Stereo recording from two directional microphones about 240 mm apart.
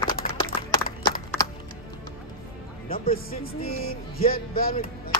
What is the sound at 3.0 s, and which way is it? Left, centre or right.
Speech, left.